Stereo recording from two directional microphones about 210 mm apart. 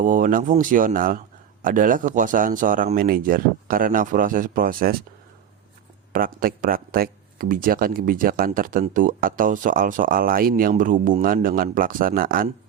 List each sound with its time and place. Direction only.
0.0 s speech: 40° right (ahead or behind)
6.1 s speech: 45° right (ahead or behind)